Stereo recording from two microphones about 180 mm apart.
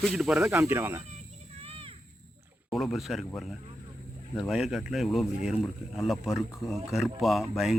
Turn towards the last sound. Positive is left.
turn(degrees=0)  # may be behind; listen again after turning